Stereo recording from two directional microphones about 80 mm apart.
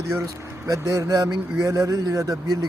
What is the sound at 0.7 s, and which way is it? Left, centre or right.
A man's voice, right.